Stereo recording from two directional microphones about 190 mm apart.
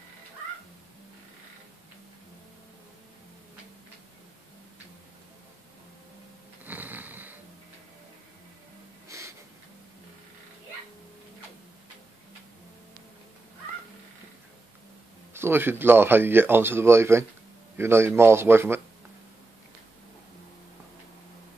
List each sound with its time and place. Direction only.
6.6 s snoring: 10° right (ahead or behind)
9.1 s a sound: 15° right (ahead or behind)
15.3 s speech: 10° right (ahead or behind)